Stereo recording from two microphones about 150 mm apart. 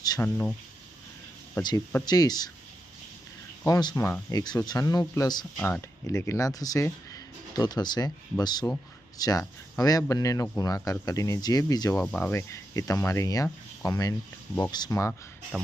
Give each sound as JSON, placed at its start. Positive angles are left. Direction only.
{"t": 0.2, "sound": "speech", "side_deg": 10}
{"t": 2.0, "sound": "speech", "side_deg": 25}
{"t": 3.6, "sound": "speech", "side_deg": 25}
{"t": 5.5, "sound": "speech", "side_deg": 15}
{"t": 11.9, "sound": "speech", "side_deg": 10}
{"t": 15.5, "sound": "speech", "side_deg": -5}